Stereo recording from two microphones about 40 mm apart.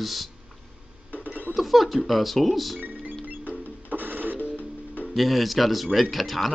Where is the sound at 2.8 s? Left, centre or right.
Right.